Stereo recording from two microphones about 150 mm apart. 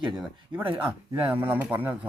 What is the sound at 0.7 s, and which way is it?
Speech, 10° right (ahead or behind).